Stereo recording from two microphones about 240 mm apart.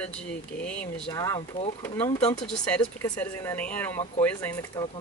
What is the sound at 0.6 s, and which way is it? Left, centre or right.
Speech, centre.